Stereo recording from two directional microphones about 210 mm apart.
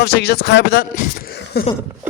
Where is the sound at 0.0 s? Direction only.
50° left (ahead or behind).